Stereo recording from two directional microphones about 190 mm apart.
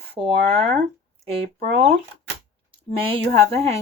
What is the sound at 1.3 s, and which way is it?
Speech, 35° right (ahead or behind).